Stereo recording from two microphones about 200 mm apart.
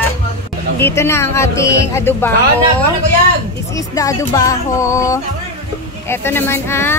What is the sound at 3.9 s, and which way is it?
Speech, 15° left (ahead or behind).